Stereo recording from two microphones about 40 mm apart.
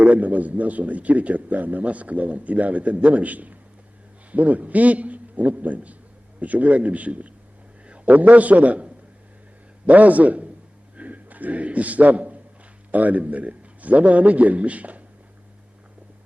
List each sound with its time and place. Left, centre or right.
0.0 s a man's voice: right
10.9 s a sound: right
12.9 s a man's voice: right